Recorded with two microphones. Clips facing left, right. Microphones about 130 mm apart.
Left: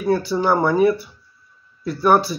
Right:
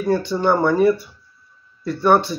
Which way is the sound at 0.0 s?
5° left (ahead or behind).